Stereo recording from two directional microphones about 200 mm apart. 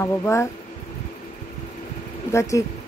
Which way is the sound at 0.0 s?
15° left (ahead or behind).